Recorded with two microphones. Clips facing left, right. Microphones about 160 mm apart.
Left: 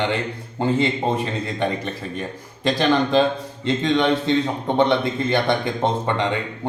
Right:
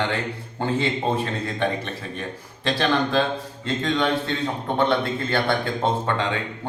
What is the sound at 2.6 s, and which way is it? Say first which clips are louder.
A man's voice: left 3 dB; 15° left (ahead or behind).